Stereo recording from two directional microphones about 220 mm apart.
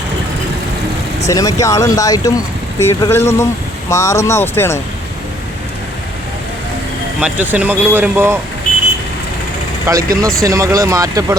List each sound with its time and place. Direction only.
1.3 s speech: 15° left (ahead or behind)
7.2 s speech: 5° right (ahead or behind)
9.8 s speech: 15° right (ahead or behind)